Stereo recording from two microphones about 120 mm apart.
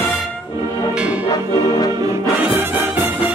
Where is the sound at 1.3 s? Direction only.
35° left (ahead or behind).